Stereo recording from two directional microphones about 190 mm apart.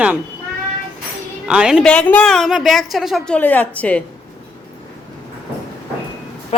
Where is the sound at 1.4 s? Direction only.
5° right (ahead or behind).